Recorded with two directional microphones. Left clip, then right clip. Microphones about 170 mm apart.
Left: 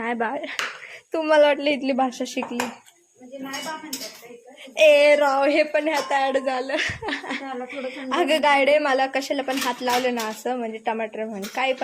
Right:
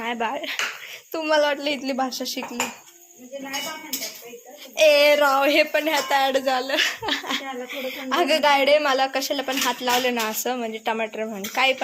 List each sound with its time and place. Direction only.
0.0 s speech: 20° left (ahead or behind)
1.1 s a woman's voice: 25° left (ahead or behind)
4.8 s a woman's voice: 15° left (ahead or behind)